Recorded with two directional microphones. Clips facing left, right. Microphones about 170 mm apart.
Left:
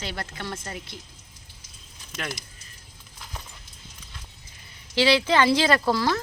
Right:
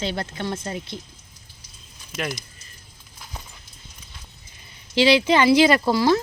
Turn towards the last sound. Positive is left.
turn(degrees=-15)  # may be behind; listen again after turning